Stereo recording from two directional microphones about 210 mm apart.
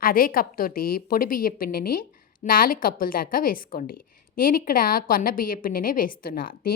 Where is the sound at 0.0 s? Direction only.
45° left (ahead or behind).